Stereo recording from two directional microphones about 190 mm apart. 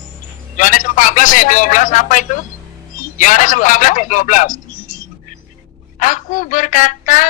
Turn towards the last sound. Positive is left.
turn(degrees=45)  # may be behind; listen again after turning